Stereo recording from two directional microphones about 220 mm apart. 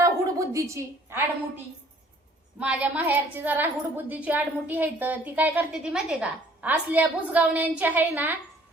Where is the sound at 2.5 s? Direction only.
5° right (ahead or behind).